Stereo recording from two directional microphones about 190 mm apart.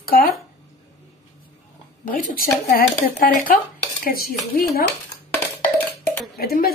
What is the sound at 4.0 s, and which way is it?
Dishes, 50° left (ahead or behind).